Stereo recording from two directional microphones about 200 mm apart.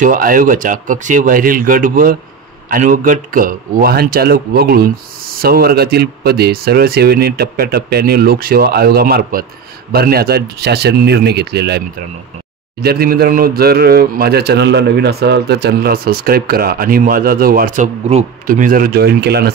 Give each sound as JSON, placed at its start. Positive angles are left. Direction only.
{"t": 0.0, "sound": "speech", "side_deg": -45}
{"t": 12.8, "sound": "speech", "side_deg": -50}